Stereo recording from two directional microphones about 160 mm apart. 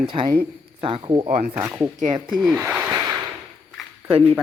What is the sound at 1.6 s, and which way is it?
Speech, 10° right (ahead or behind).